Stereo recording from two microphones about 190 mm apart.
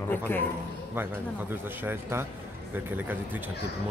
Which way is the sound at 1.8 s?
10° right (ahead or behind).